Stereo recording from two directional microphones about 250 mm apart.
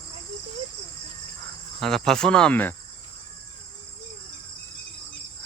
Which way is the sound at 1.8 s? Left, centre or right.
Centre.